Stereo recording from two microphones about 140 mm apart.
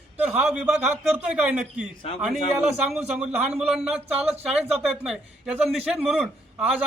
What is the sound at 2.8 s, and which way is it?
A man's voice, 5° right (ahead or behind).